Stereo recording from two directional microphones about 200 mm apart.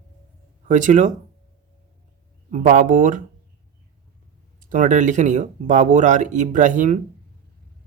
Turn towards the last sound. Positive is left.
turn(degrees=-40)  # may be behind; listen again after turning